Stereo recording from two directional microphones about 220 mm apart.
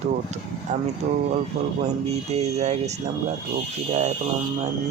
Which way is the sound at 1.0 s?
35° right (ahead or behind).